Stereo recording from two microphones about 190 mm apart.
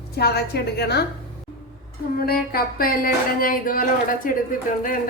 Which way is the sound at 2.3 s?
50° left (ahead or behind).